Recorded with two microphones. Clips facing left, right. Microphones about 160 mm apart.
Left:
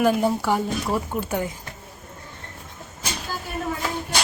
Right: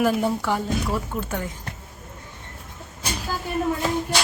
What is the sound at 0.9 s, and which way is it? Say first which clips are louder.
Speech: left 2 dB; 20° left (ahead or behind).